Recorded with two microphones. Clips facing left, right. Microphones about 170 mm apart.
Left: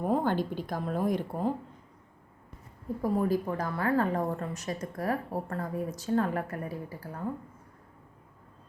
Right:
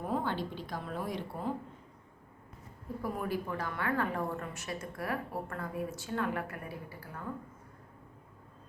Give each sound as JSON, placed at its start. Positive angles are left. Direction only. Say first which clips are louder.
{"t": 0.1, "sound": "speech", "louder": "left 6 dB", "side_deg": 45}
{"t": 3.0, "sound": "a woman's voice", "louder": "left 8 dB", "side_deg": 40}